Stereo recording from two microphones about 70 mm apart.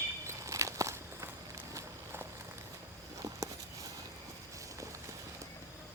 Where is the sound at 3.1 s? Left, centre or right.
Right.